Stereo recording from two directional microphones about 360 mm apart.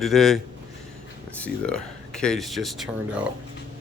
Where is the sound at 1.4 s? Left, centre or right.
Centre.